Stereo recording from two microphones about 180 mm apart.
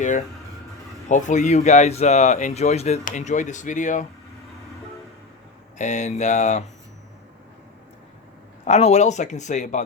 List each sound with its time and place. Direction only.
1.0 s speech: 45° left (ahead or behind)
5.7 s speech: 40° left (ahead or behind)
8.6 s speech: 40° left (ahead or behind)